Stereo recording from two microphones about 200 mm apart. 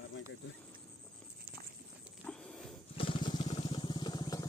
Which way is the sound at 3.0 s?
25° left (ahead or behind).